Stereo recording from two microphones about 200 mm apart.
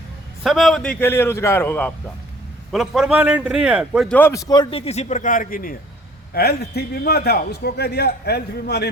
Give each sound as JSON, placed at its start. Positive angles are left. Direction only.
{"t": 0.4, "sound": "a man's voice", "side_deg": 0}
{"t": 2.7, "sound": "a man's voice", "side_deg": 0}
{"t": 4.1, "sound": "a man's voice", "side_deg": 10}